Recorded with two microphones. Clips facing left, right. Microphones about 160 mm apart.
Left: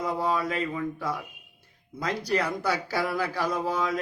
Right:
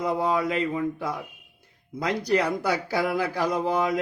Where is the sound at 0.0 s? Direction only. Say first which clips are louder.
Right 3 dB; 20° right (ahead or behind).